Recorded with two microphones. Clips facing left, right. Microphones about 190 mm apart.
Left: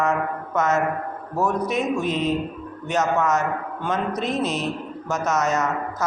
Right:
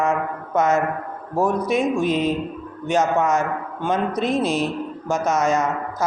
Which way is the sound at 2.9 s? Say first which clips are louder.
Right 2 dB; 30° right (ahead or behind).